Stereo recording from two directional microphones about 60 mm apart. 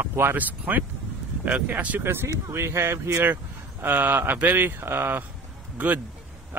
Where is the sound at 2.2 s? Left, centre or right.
Right.